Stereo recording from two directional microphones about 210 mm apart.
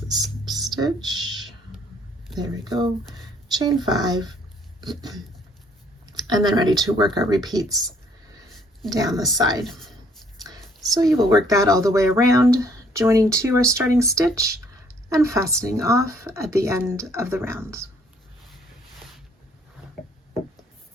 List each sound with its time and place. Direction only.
0.1 s a sound: 20° right (ahead or behind)
2.4 s speech: 20° right (ahead or behind)
6.2 s speech: 20° right (ahead or behind)
10.9 s speech: 15° right (ahead or behind)